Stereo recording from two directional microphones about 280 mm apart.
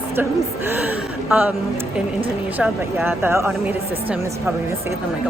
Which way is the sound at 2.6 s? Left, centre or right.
Centre.